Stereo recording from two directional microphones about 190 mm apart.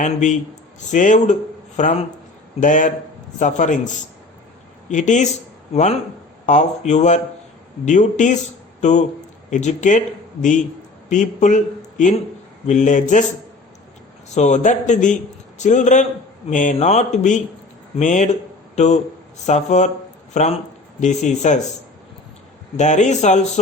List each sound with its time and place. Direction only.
0.0 s a man's voice: 40° left (ahead or behind)
4.9 s a man's voice: 40° left (ahead or behind)
11.1 s a man's voice: 40° left (ahead or behind)
14.3 s a man's voice: 40° left (ahead or behind)
22.8 s a man's voice: 40° left (ahead or behind)